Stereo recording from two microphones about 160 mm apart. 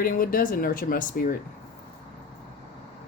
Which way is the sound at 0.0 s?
60° left (ahead or behind).